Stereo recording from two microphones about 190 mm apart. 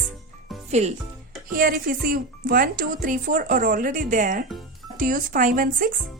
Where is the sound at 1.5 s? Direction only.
50° right (ahead or behind).